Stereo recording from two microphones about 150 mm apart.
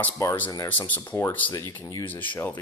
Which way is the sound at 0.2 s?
15° left (ahead or behind).